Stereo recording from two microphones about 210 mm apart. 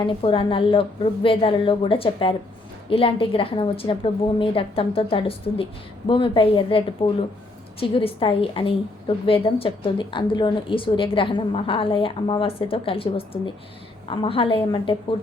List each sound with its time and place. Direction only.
0.0 s a woman's voice: 25° left (ahead or behind)